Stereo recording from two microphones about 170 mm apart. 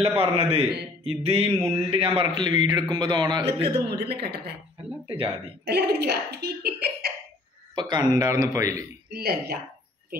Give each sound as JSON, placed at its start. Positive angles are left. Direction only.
{"t": 0.2, "sound": "a man's voice", "side_deg": -35}
{"t": 1.4, "sound": "mantra", "side_deg": -15}
{"t": 1.9, "sound": "a man's voice", "side_deg": -35}
{"t": 3.9, "sound": "speech", "side_deg": -70}
{"t": 5.0, "sound": "speech", "side_deg": -35}
{"t": 5.7, "sound": "speech", "side_deg": -75}
{"t": 7.7, "sound": "a man's voice", "side_deg": -25}
{"t": 9.1, "sound": "speech", "side_deg": -65}